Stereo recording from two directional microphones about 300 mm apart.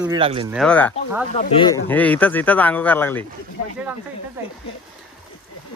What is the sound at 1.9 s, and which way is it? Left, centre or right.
Speech, centre.